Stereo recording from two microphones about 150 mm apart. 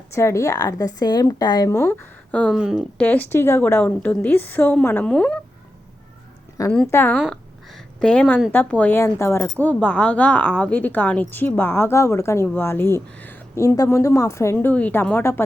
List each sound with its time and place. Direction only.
0.1 s a woman's voice: 20° left (ahead or behind)
2.6 s speech: 5° right (ahead or behind)
3.0 s speech: 10° left (ahead or behind)
6.6 s a woman's voice: 20° left (ahead or behind)
7.2 s a sound: centre (ahead or behind)
8.5 s speech: 10° left (ahead or behind)